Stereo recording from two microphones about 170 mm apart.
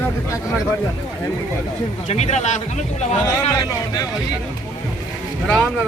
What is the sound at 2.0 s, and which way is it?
Speech, 40° left (ahead or behind).